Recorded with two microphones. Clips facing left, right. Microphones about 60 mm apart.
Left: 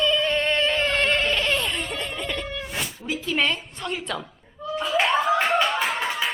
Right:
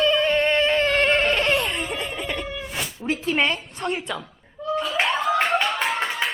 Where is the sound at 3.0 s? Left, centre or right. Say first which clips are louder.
Right 5 dB; right.